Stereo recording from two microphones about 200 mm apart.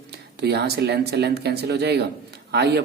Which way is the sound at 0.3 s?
55° right (ahead or behind).